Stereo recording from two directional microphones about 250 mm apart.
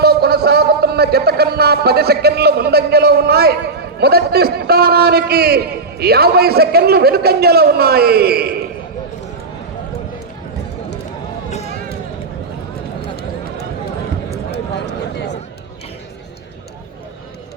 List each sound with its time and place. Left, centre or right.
0.0 s a man's voice: right